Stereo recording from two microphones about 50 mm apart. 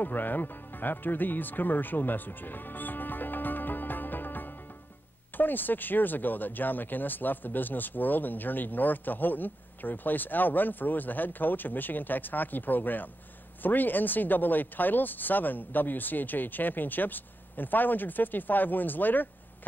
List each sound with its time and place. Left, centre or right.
0.0 s speech: left